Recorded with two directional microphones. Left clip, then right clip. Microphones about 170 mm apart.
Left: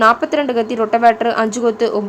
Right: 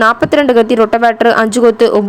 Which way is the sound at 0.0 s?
35° right (ahead or behind).